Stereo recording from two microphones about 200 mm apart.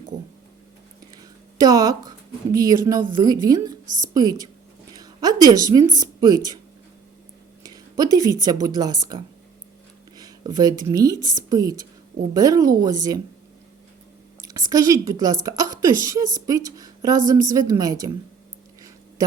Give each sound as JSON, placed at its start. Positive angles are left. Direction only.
{"t": 1.5, "sound": "a woman's voice", "side_deg": -20}
{"t": 7.6, "sound": "a woman's voice", "side_deg": -20}
{"t": 14.4, "sound": "a woman's voice", "side_deg": -20}